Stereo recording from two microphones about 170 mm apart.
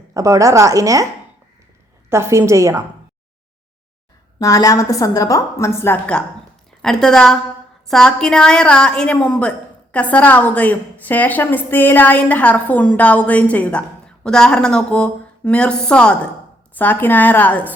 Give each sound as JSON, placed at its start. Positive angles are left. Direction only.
{"t": 0.1, "sound": "a woman's voice", "side_deg": -20}
{"t": 2.0, "sound": "a woman's voice", "side_deg": -15}
{"t": 4.4, "sound": "a woman's voice", "side_deg": 20}